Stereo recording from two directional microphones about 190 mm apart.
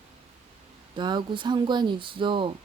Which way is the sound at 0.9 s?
25° right (ahead or behind).